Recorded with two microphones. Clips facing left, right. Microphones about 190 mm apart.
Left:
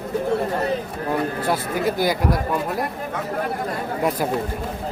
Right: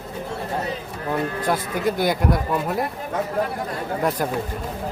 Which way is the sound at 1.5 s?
Centre (ahead or behind).